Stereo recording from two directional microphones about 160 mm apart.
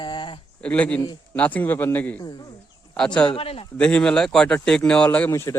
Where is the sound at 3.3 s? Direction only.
35° left (ahead or behind).